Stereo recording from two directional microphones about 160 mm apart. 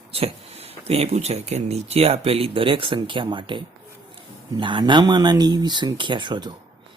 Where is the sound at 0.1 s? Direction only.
40° right (ahead or behind).